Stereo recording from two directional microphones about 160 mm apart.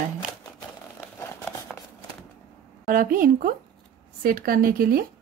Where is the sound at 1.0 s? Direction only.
10° left (ahead or behind).